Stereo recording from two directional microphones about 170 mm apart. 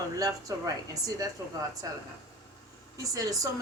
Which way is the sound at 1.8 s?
20° right (ahead or behind).